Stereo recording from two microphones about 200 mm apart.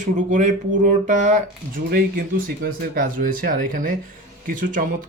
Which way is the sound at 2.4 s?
45° right (ahead or behind).